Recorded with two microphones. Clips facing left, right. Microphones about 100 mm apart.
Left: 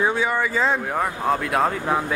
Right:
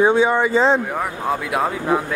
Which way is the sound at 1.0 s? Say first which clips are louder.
Even; 5° right (ahead or behind).